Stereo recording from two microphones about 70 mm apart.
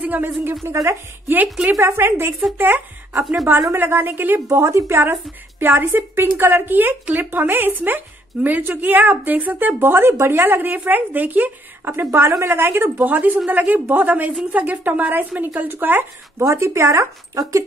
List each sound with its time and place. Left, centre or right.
0.0 s a sound: right
0.6 s speech: right
1.3 s a woman's voice: right
4.5 s a woman's voice: right
16.3 s speech: right
17.4 s speech: right